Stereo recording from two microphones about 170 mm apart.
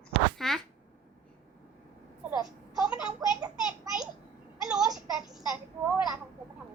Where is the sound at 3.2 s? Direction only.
20° right (ahead or behind).